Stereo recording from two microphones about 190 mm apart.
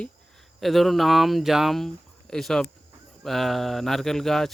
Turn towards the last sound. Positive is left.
turn(degrees=0)  # may be behind; listen again after turning